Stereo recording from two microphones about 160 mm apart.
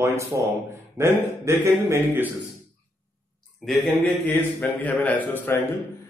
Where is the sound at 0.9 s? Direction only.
15° right (ahead or behind).